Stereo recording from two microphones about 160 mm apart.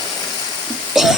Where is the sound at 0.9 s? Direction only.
Centre (ahead or behind).